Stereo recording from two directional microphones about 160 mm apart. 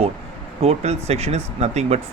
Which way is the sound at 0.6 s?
40° right (ahead or behind).